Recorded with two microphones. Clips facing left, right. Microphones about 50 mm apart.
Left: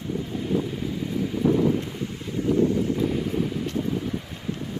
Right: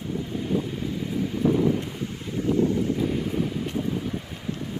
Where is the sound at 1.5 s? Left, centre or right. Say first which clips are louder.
Left 1 dB; centre.